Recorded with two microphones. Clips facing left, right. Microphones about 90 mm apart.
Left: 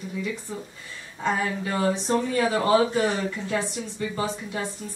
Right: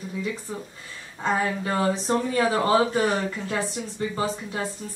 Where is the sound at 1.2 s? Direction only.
30° right (ahead or behind).